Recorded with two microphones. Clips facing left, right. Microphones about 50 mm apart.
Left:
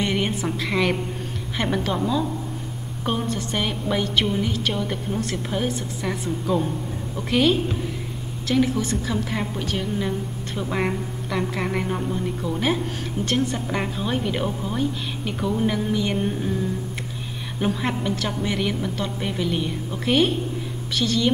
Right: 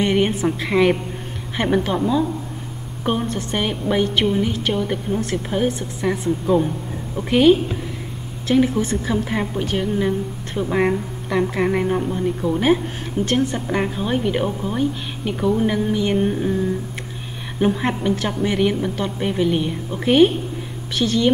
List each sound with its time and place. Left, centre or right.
0.0 s a woman's voice: centre
13.5 s a woman's voice: centre
17.6 s a woman's voice: centre